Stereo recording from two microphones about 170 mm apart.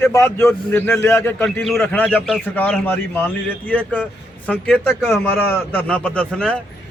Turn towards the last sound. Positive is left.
turn(degrees=5)  # may be behind; listen again after turning